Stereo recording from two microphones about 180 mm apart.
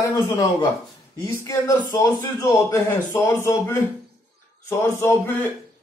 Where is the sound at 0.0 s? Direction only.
20° left (ahead or behind).